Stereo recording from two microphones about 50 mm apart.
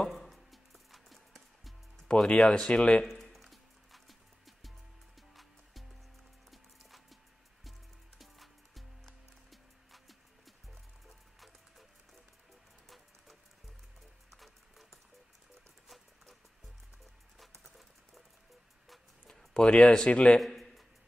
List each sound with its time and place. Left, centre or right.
0.1 s music: centre
2.1 s speech: centre
3.0 s music: centre
8.2 s music: centre
12.8 s music: centre
19.2 s a sound: centre
20.3 s a sound: centre